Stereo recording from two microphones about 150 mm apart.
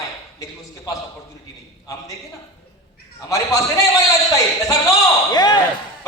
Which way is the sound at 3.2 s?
20° left (ahead or behind).